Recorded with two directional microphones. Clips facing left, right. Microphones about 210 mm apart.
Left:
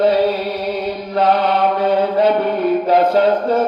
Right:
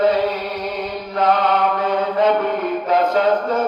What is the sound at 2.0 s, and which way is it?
Chant, 35° left (ahead or behind).